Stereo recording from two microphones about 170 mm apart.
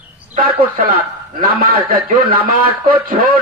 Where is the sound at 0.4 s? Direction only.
55° right (ahead or behind).